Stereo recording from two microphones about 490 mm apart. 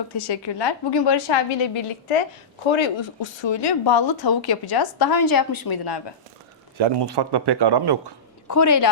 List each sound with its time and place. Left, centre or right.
0.1 s a woman's voice: left
2.6 s speech: left
6.7 s a man's voice: right
8.4 s a woman's voice: left